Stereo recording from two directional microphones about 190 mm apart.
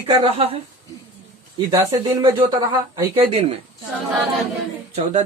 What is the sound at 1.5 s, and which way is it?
Speech, 20° right (ahead or behind).